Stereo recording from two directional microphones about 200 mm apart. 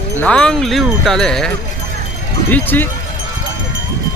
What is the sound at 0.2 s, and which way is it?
Speech, 5° left (ahead or behind).